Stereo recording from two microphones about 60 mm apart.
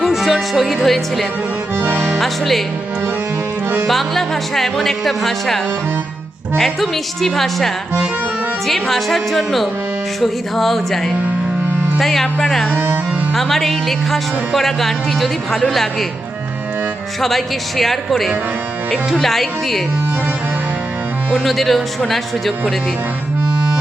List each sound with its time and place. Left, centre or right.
0.0 s speech: centre
1.7 s music: right
2.2 s speech: centre
3.8 s speech: centre
12.5 s music: centre
13.3 s speech: centre
17.2 s speech: centre
21.4 s speech: centre